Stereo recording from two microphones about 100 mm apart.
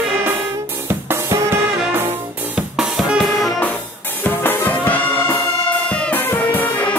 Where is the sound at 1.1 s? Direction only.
25° right (ahead or behind).